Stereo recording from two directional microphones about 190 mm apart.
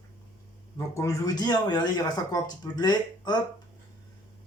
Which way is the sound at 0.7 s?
15° left (ahead or behind).